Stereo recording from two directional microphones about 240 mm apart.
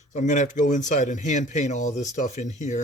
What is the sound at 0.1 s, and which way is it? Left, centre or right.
Speech, left.